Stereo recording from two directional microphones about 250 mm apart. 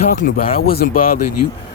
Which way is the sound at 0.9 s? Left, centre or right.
Left.